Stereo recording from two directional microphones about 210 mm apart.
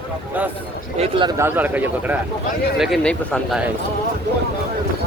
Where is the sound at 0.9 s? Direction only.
25° right (ahead or behind).